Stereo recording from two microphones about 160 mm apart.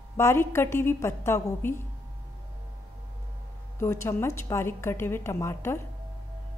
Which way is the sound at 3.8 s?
15° left (ahead or behind).